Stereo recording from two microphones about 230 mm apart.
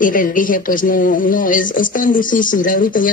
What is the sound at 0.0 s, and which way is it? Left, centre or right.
Speech, left.